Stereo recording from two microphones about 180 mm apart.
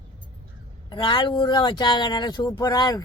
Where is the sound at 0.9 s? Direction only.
25° left (ahead or behind).